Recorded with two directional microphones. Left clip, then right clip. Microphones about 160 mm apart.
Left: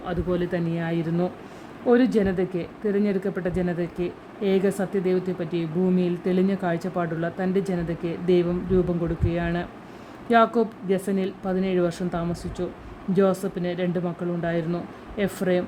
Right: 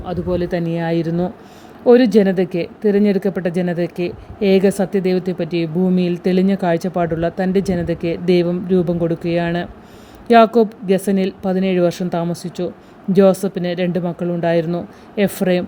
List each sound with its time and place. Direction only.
0.0 s speech: 35° right (ahead or behind)